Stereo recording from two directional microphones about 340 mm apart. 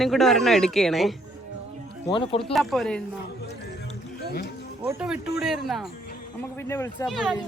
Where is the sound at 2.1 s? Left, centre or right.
Centre.